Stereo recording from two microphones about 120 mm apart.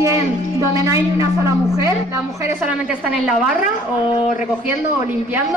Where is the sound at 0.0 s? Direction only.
25° right (ahead or behind).